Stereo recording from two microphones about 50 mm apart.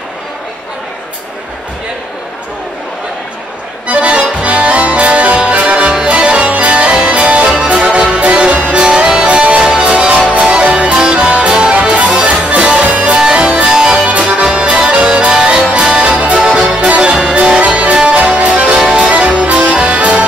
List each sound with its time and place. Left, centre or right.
3.8 s accordion: right
8.8 s music: centre